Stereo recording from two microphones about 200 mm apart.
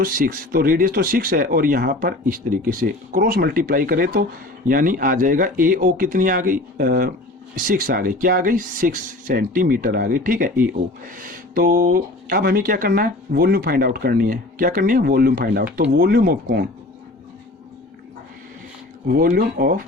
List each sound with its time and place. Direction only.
0.0 s speech: 45° right (ahead or behind)
19.0 s speech: 50° right (ahead or behind)